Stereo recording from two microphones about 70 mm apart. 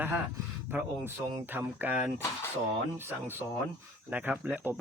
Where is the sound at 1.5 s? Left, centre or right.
Right.